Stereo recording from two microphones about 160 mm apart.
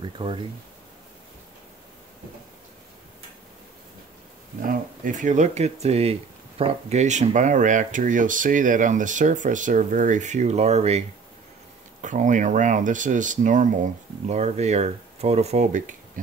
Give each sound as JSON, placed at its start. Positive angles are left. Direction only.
{"t": 0.0, "sound": "speech", "side_deg": -30}
{"t": 4.6, "sound": "speech", "side_deg": -55}